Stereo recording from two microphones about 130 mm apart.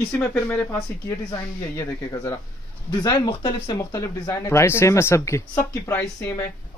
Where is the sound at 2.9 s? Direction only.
35° left (ahead or behind).